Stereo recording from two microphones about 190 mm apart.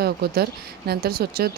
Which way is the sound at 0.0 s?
55° right (ahead or behind).